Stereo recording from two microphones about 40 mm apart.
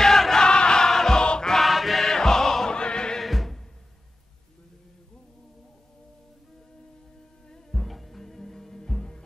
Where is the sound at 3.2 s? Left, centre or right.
Centre.